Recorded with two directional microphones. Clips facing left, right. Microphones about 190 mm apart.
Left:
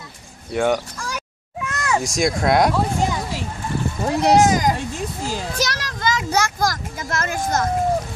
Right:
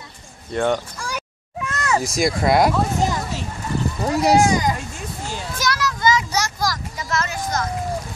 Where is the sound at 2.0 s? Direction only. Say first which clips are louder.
Even; centre (ahead or behind).